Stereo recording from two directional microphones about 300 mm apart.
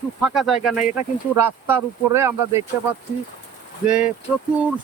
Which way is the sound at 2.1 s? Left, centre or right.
Centre.